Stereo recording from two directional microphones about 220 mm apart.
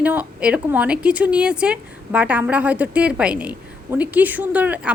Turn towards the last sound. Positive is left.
turn(degrees=-5)  # may be behind; listen again after turning